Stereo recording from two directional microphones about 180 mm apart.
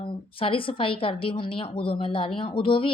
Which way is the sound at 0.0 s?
30° left (ahead or behind).